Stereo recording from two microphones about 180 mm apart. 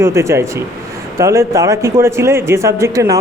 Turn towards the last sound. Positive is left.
turn(degrees=-15)  # may be behind; listen again after turning